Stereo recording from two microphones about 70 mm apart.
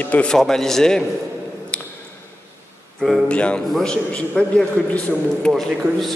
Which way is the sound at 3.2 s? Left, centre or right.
Centre.